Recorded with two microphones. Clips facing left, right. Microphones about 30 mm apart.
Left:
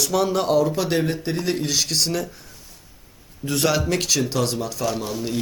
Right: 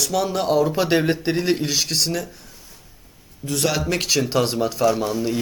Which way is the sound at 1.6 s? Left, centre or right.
Centre.